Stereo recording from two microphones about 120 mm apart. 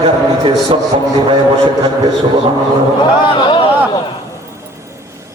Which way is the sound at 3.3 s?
40° left (ahead or behind).